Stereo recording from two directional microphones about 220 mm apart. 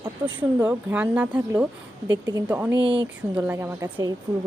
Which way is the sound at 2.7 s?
20° right (ahead or behind).